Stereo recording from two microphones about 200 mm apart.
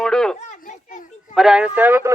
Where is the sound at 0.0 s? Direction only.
5° left (ahead or behind).